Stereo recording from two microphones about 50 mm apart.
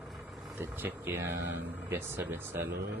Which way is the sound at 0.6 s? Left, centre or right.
Right.